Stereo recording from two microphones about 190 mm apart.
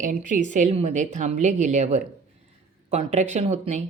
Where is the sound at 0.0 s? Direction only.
40° right (ahead or behind).